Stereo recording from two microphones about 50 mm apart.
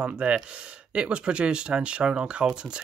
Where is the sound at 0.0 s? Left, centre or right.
Right.